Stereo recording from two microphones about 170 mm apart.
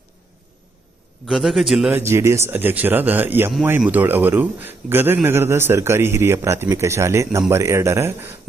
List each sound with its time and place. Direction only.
1.3 s a man's voice: centre (ahead or behind)
1.9 s a man's voice: 15° right (ahead or behind)